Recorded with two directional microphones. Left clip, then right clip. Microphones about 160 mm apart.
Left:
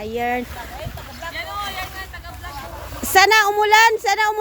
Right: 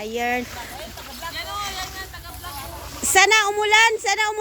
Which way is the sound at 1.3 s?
30° left (ahead or behind).